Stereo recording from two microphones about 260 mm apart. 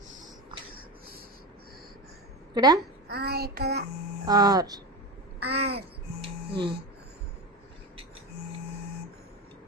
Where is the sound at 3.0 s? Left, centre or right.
Right.